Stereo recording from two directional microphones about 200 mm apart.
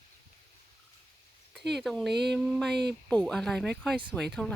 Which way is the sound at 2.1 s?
55° right (ahead or behind).